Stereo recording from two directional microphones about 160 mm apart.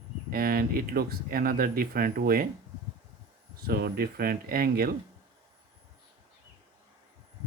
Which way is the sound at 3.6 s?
75° right (ahead or behind).